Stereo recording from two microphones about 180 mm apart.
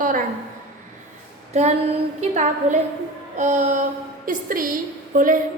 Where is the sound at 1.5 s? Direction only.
40° right (ahead or behind).